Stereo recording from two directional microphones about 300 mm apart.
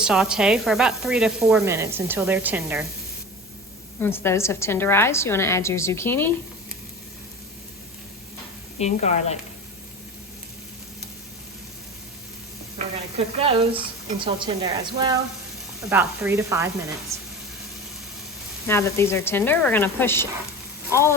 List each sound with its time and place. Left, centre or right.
0.0 s sizzle: centre
4.0 s a woman's voice: centre
8.8 s speech: left
12.8 s sizzle: right
13.1 s speech: centre
18.7 s a woman's voice: centre